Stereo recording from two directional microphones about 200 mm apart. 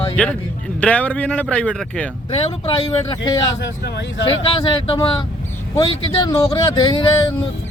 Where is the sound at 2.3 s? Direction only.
30° left (ahead or behind).